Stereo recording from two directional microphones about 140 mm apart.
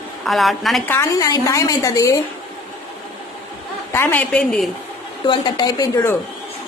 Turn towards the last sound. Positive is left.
turn(degrees=30)  # may be behind; listen again after turning